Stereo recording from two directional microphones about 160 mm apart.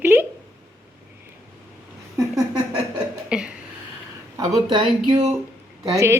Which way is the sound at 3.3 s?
5° right (ahead or behind).